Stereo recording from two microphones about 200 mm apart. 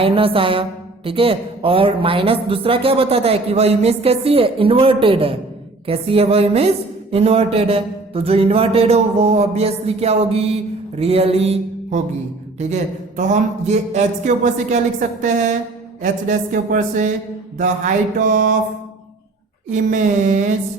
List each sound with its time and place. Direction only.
0.0 s a woman's voice: 30° right (ahead or behind)
16.0 s speech: 40° right (ahead or behind)
19.7 s speech: 40° right (ahead or behind)